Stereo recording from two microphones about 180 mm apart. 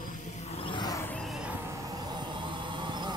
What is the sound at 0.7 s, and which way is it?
Music, 25° left (ahead or behind).